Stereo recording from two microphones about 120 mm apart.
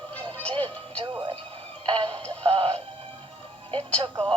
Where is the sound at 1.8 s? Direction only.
45° right (ahead or behind).